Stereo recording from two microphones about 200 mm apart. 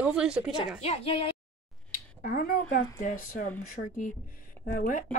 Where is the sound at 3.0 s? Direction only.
40° left (ahead or behind).